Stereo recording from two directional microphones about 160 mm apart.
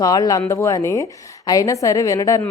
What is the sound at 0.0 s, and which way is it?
A woman's voice, 20° left (ahead or behind).